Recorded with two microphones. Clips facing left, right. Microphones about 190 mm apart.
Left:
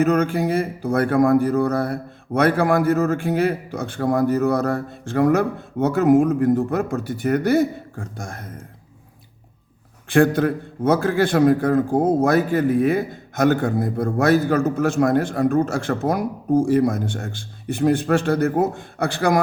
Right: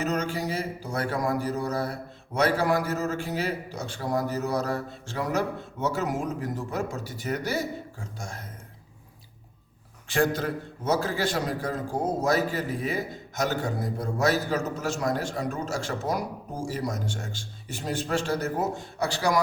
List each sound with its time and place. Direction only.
0.0 s a man's voice: 55° left (ahead or behind)
10.1 s a man's voice: 55° left (ahead or behind)